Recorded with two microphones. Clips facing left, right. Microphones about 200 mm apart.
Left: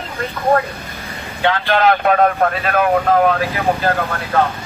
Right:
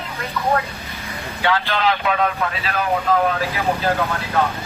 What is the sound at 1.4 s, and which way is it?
Speech, 50° left (ahead or behind).